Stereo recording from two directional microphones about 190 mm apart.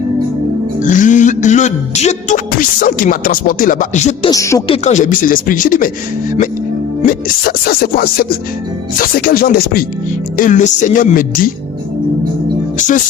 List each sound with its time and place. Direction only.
0.8 s music: 40° left (ahead or behind)
4.3 s speech: 15° left (ahead or behind)
4.7 s speech: 35° left (ahead or behind)
7.1 s speech: 50° left (ahead or behind)
12.7 s speech: 40° left (ahead or behind)